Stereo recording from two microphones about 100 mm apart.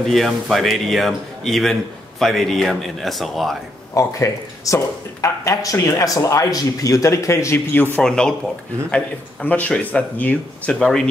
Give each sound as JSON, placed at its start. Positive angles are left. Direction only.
{"t": 0.0, "sound": "speech", "side_deg": 0}
{"t": 3.9, "sound": "speech", "side_deg": 30}
{"t": 8.0, "sound": "speech", "side_deg": 5}